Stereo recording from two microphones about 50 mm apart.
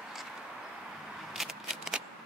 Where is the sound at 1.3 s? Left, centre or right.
Centre.